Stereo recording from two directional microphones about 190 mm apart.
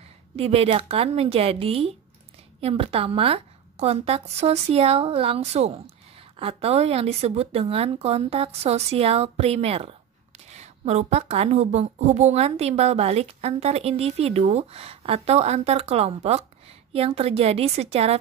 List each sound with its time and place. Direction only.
0.4 s a woman's voice: 30° right (ahead or behind)